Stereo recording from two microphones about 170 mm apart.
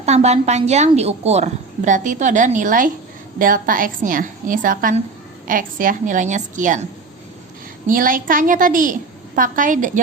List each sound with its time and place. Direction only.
0.0 s a woman's voice: 40° right (ahead or behind)
7.9 s a woman's voice: 55° right (ahead or behind)